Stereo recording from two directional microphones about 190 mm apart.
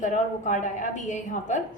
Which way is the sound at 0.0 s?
40° left (ahead or behind).